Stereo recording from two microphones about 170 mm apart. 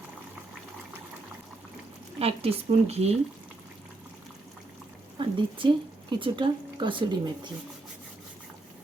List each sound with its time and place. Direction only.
2.1 s speech: 35° right (ahead or behind)
5.1 s speech: 30° right (ahead or behind)